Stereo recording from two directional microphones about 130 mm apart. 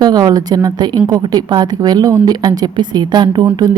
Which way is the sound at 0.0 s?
30° right (ahead or behind).